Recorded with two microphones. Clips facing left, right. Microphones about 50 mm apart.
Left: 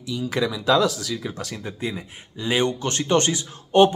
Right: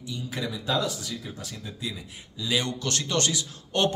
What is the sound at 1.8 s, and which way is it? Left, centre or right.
A man's voice, left.